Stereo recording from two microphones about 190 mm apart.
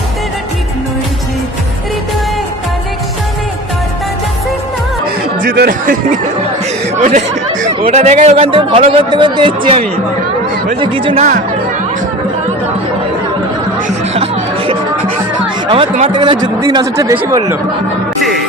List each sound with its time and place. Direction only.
5.4 s speech: 50° right (ahead or behind)
7.0 s a man's voice: 40° right (ahead or behind)
13.8 s chatter: 35° right (ahead or behind)
15.6 s a man's voice: 30° right (ahead or behind)